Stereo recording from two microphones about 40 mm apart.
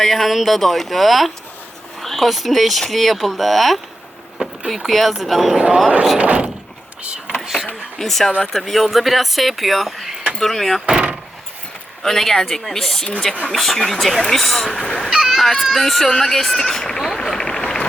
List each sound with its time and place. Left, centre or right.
0.0 s speech: centre
4.4 s vehicle: right
4.9 s speech: centre
5.5 s speech: right
6.1 s speech: right
7.9 s speech: centre
10.8 s a sound: centre
12.0 s speech: centre
15.1 s speech: centre
16.0 s speech: centre
16.3 s speech: centre
17.2 s a sound: centre